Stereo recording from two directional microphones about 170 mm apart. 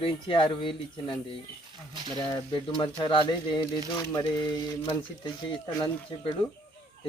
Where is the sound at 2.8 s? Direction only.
30° left (ahead or behind).